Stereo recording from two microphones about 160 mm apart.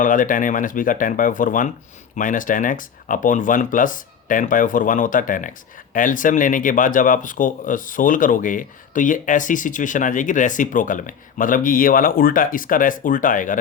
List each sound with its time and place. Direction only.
0.0 s speech: 55° left (ahead or behind)